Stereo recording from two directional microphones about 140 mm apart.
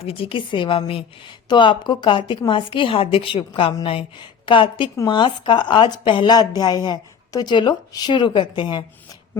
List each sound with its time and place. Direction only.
0.0 s speech: 45° left (ahead or behind)